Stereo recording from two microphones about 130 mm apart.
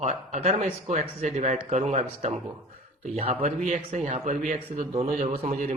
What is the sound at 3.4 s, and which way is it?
A man's voice, 75° right (ahead or behind).